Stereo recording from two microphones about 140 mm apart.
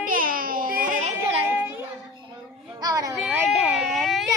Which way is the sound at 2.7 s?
30° right (ahead or behind).